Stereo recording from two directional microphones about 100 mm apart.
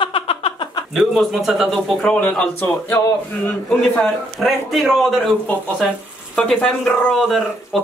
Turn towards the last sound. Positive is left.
turn(degrees=0)  # may be behind; listen again after turning